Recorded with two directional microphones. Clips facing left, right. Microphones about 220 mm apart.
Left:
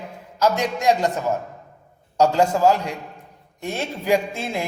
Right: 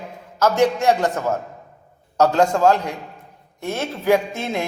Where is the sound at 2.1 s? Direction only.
10° left (ahead or behind).